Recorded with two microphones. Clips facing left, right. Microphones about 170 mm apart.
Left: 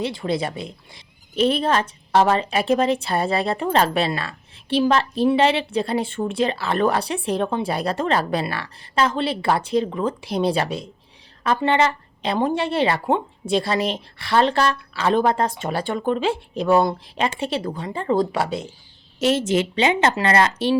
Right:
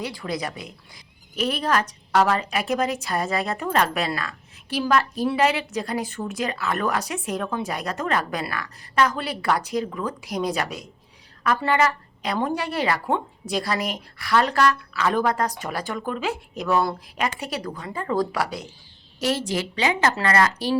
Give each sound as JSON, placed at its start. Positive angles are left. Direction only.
{"t": 0.0, "sound": "a woman's voice", "side_deg": 25}